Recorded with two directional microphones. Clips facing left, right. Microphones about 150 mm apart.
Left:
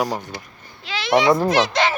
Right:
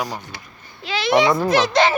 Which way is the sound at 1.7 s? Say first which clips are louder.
Right 4 dB; 30° right (ahead or behind).